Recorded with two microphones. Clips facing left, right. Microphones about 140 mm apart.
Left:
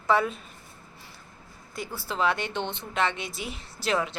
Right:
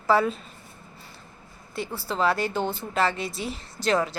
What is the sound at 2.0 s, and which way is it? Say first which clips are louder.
A woman's voice: right 3 dB; centre (ahead or behind).